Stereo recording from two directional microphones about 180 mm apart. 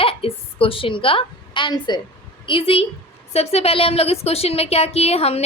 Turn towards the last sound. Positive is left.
turn(degrees=35)  # may be behind; listen again after turning